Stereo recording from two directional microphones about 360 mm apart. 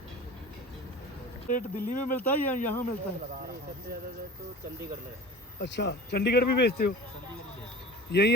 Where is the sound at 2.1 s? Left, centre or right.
Centre.